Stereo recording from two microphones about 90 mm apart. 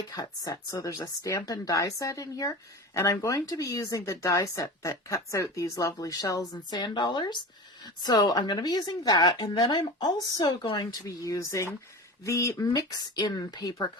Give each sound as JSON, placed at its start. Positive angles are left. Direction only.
{"t": 0.1, "sound": "speech", "side_deg": 45}